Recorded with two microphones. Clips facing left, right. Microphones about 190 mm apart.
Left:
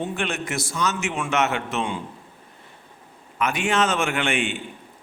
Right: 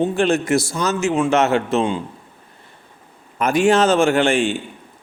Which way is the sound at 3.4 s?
35° right (ahead or behind).